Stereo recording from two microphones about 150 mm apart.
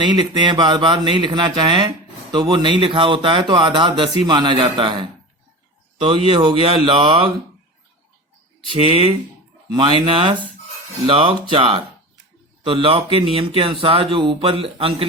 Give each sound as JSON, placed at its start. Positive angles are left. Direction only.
{"t": 0.0, "sound": "speech", "side_deg": -30}
{"t": 8.7, "sound": "speech", "side_deg": -40}